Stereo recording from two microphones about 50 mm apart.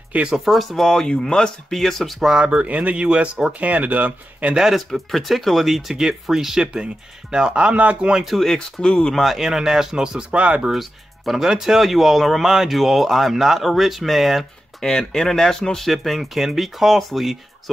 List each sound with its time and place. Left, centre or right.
0.5 s speech: centre
2.3 s speech: right
4.6 s speech: centre; by 8.1 s right
8.3 s speech: centre
8.8 s speech: centre
9.1 s speech: centre
10.4 s speech: right
10.7 s speech: centre
14.8 s speech: centre